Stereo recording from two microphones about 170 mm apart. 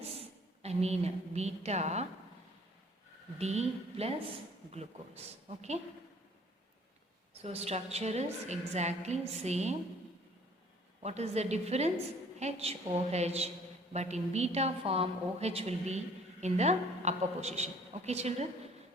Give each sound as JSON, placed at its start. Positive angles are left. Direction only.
{"t": 0.0, "sound": "a woman's voice", "side_deg": -35}
{"t": 3.3, "sound": "a woman's voice", "side_deg": -40}
{"t": 7.4, "sound": "a woman's voice", "side_deg": -40}
{"t": 11.0, "sound": "a woman's voice", "side_deg": -40}